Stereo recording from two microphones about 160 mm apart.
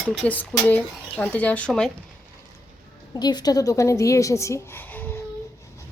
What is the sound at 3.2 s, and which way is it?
Speech, 25° left (ahead or behind).